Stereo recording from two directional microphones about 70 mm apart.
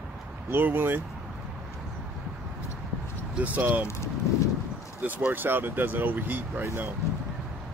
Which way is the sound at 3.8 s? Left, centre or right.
Left.